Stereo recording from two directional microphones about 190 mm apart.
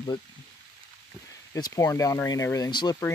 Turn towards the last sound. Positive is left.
turn(degrees=20)  # may be behind; listen again after turning